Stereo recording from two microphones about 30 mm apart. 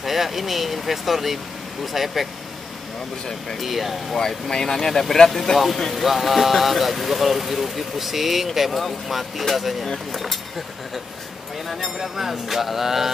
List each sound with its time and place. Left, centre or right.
0.0 s speech: centre
3.6 s speech: centre
4.5 s speech: centre
11.8 s mantra: centre